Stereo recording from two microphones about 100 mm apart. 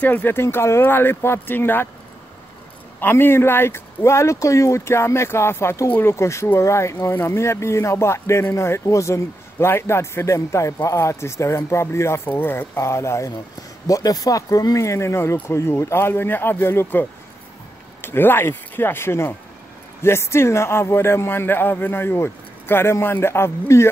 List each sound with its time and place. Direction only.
0.0 s speech: 15° left (ahead or behind)
3.0 s speech: 20° left (ahead or behind)
18.0 s speech: 20° left (ahead or behind)